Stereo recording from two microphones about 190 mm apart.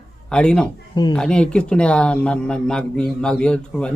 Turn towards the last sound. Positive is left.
turn(degrees=5)  # may be behind; listen again after turning